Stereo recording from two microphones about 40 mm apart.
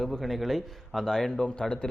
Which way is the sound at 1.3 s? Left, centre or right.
Left.